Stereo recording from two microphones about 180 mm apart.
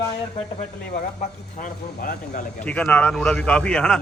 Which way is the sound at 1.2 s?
45° left (ahead or behind).